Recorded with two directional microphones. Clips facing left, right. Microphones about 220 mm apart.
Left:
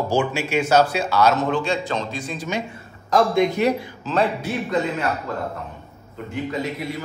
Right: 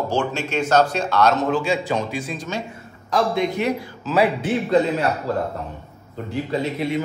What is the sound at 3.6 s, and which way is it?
Speech, 40° left (ahead or behind).